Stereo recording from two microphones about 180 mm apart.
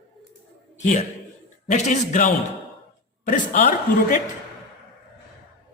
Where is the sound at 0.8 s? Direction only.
40° left (ahead or behind).